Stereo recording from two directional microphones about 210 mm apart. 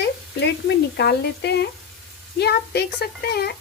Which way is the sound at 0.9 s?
50° left (ahead or behind).